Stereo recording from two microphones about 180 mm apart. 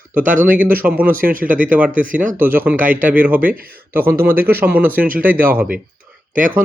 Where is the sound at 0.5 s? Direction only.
10° right (ahead or behind).